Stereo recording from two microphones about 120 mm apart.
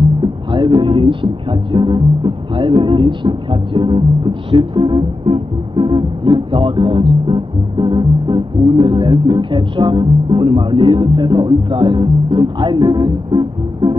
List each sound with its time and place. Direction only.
0.2 s speech: 40° right (ahead or behind)